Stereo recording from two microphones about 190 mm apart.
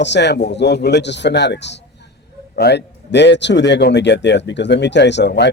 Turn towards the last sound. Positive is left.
turn(degrees=60)  # may be behind; listen again after turning